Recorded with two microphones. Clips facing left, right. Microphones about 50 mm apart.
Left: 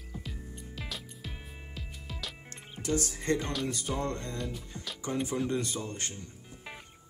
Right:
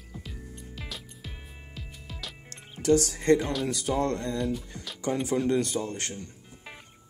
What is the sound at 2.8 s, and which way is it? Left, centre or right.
Speech, right.